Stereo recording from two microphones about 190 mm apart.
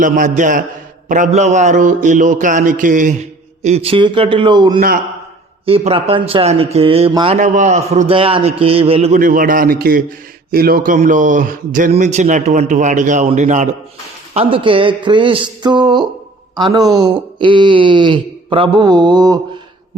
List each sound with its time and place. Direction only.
0.0 s a man's voice: 45° right (ahead or behind); by 7.3 s 25° right (ahead or behind)
7.3 s speech: 40° right (ahead or behind)
14.3 s speech: 25° right (ahead or behind)